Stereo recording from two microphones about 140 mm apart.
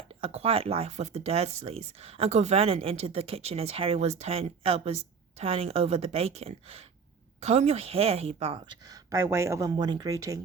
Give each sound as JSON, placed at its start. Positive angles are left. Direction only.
{"t": 0.2, "sound": "speech", "side_deg": -45}
{"t": 9.0, "sound": "speech", "side_deg": -25}